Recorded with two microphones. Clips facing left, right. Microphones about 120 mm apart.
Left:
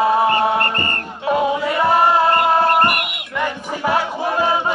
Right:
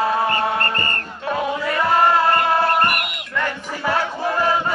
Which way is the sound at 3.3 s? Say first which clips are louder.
Left 2 dB; 15° left (ahead or behind).